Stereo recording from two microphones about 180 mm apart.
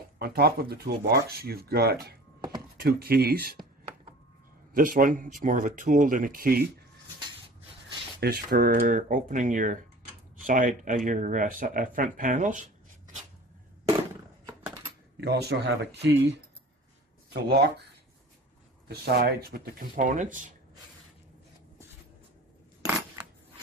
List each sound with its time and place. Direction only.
0.2 s speech: 60° right (ahead or behind)
4.7 s speech: 50° right (ahead or behind)
8.2 s speech: 60° right (ahead or behind)
15.1 s speech: 65° right (ahead or behind)
18.9 s speech: 60° right (ahead or behind); by 20.4 s 45° right (ahead or behind)